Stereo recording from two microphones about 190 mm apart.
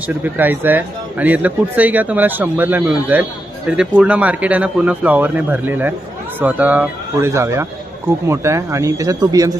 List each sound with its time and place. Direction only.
0.2 s speech: 10° right (ahead or behind)